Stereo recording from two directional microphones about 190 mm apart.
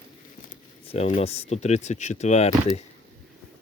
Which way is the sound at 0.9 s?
30° left (ahead or behind).